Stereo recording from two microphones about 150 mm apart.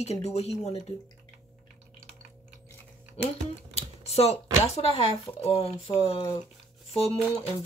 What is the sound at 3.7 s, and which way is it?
Speech, 45° left (ahead or behind).